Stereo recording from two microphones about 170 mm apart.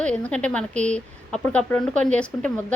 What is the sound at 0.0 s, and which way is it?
A woman's voice, 5° left (ahead or behind).